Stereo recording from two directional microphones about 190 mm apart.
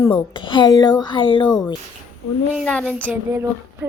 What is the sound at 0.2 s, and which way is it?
A woman's voice, 25° left (ahead or behind).